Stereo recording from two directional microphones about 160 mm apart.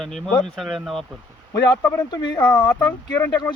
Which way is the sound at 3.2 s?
15° left (ahead or behind).